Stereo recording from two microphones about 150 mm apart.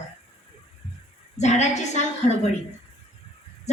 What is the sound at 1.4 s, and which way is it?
Speech, 50° left (ahead or behind).